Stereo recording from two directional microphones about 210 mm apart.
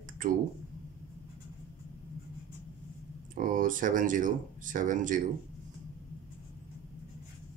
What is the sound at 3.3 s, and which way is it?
Speech, 40° right (ahead or behind).